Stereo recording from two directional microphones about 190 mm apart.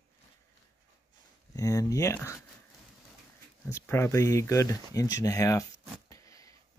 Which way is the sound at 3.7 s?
15° left (ahead or behind).